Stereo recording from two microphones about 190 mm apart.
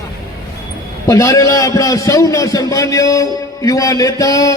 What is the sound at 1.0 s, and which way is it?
A man's voice, 15° left (ahead or behind).